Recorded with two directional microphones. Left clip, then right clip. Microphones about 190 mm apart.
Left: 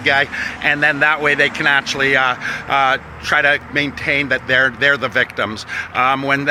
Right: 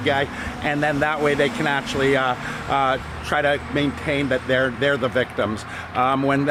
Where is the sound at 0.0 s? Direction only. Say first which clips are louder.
Left 6 dB; 5° left (ahead or behind).